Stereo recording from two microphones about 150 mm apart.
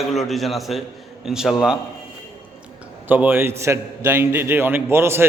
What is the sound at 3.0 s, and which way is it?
A man's voice, 15° right (ahead or behind).